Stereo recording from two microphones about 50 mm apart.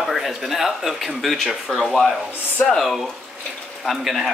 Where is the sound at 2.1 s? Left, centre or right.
Right.